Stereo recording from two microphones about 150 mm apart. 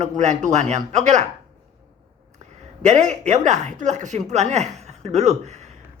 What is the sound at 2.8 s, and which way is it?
A man's voice, 55° right (ahead or behind).